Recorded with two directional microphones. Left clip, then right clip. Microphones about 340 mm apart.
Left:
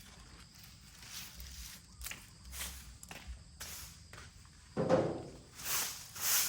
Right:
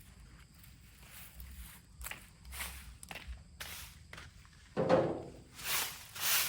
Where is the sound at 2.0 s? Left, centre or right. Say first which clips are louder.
Right 2 dB; centre.